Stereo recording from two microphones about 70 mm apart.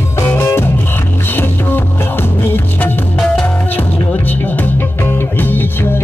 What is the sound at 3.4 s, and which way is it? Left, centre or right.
Music, left.